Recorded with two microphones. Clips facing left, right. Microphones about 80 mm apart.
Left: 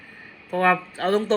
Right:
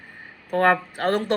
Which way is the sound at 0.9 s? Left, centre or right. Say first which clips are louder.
Left 1 dB; right.